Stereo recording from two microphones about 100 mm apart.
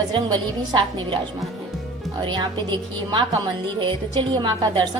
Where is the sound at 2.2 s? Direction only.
50° right (ahead or behind).